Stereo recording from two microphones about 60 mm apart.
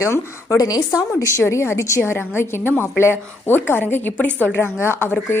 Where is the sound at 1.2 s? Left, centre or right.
Left.